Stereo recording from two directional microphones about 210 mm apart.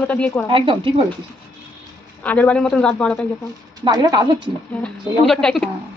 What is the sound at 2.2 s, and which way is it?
A man's voice, 5° left (ahead or behind).